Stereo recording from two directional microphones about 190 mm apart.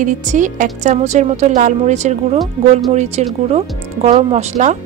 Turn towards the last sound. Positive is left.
turn(degrees=-35)  # may be behind; listen again after turning